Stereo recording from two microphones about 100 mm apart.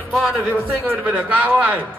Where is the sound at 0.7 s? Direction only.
15° right (ahead or behind).